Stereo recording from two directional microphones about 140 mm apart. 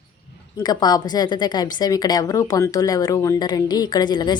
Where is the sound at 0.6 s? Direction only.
30° left (ahead or behind).